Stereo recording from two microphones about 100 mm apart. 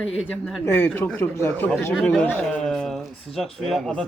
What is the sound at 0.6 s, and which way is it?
Speech, 20° left (ahead or behind).